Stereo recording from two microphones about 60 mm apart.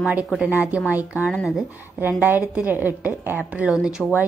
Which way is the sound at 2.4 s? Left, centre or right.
Centre.